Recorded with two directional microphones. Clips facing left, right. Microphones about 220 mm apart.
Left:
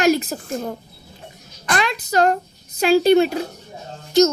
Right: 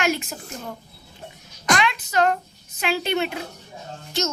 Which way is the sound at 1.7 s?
40° left (ahead or behind).